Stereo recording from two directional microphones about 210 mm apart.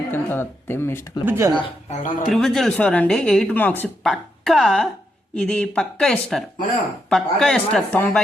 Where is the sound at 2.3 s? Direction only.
Centre (ahead or behind).